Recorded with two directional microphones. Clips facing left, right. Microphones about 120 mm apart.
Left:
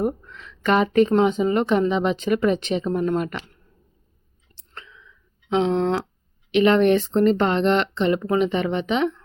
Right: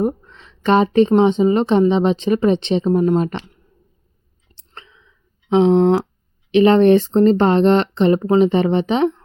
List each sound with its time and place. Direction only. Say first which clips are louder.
0.0 s speech: right 4 dB; 25° right (ahead or behind)
3.2 s speech: right 5 dB; 30° right (ahead or behind)
4.7 s whispering: right 1 dB; 30° right (ahead or behind)
5.5 s speech: right 7 dB; 30° right (ahead or behind)
6.5 s speech: right 5 dB; 35° right (ahead or behind)